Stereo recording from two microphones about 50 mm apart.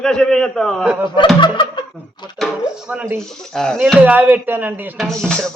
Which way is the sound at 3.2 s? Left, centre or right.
Centre.